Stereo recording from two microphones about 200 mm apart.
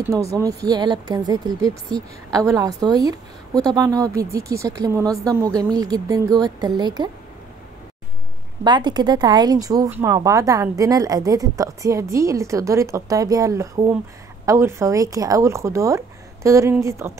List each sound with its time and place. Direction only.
0.0 s a woman's voice: 15° right (ahead or behind)
8.6 s a woman's voice: 20° right (ahead or behind)